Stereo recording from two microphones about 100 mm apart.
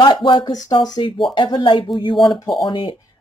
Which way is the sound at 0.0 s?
50° left (ahead or behind).